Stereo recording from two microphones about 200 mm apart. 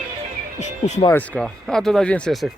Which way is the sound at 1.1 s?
5° left (ahead or behind).